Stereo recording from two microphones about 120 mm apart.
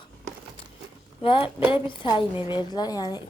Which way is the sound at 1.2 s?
50° left (ahead or behind).